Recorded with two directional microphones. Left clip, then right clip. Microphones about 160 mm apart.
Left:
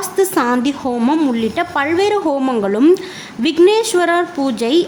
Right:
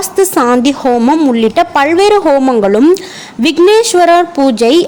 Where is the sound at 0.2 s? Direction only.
30° right (ahead or behind).